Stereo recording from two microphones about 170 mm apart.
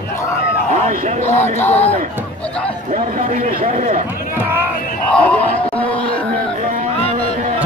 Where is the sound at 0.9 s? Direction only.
50° right (ahead or behind).